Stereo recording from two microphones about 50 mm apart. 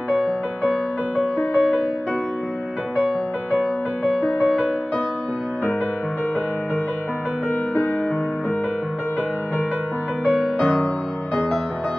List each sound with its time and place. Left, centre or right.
0.1 s music: centre
4.0 s music: centre
10.2 s music: left